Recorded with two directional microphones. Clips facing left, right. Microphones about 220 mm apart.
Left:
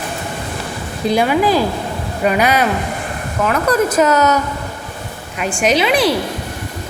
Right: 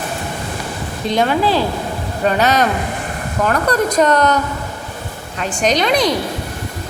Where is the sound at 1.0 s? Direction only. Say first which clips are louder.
Left 2 dB; 10° left (ahead or behind).